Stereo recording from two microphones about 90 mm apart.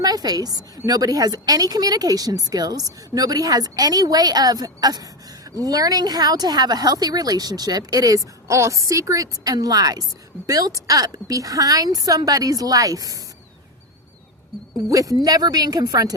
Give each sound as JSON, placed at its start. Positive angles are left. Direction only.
{"t": 0.0, "sound": "a woman's voice", "side_deg": -45}
{"t": 14.8, "sound": "speech", "side_deg": -40}